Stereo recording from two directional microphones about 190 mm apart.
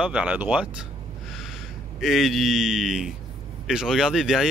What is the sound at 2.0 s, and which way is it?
Speech, centre (ahead or behind).